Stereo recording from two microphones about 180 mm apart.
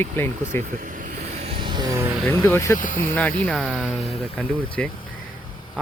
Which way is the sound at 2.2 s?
10° left (ahead or behind).